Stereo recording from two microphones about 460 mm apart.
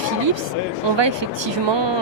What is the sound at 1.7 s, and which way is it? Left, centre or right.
Speech, right.